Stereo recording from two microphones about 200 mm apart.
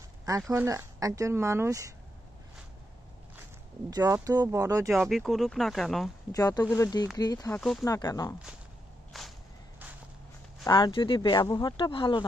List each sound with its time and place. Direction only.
0.5 s speech: 15° right (ahead or behind)
3.9 s speech: 15° right (ahead or behind)
4.8 s speech: centre (ahead or behind)
6.3 s speech: 20° left (ahead or behind)
9.1 s whip: centre (ahead or behind)
10.6 s speech: 20° left (ahead or behind)